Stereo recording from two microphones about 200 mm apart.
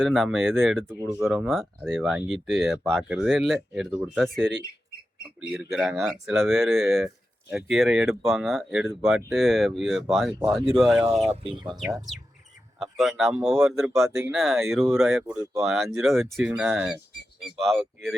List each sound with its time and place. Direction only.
0.0 s speech: centre (ahead or behind)
5.7 s speech: centre (ahead or behind)
11.3 s speech: 25° right (ahead or behind)
12.8 s speech: centre (ahead or behind)